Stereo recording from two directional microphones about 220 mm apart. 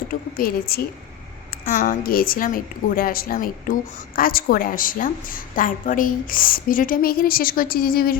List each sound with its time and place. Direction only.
0.1 s a woman's voice: 40° left (ahead or behind)